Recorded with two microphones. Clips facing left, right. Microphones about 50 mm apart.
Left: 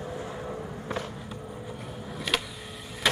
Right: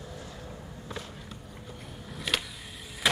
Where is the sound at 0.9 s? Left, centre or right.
Left.